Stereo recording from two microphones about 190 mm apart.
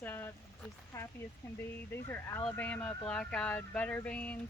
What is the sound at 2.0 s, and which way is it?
Speech, 15° left (ahead or behind).